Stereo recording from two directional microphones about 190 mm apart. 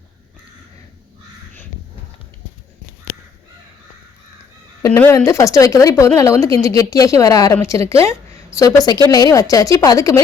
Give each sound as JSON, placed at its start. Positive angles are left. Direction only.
{"t": 4.8, "sound": "speech", "side_deg": 10}